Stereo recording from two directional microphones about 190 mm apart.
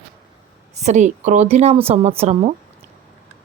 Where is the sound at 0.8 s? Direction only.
40° right (ahead or behind).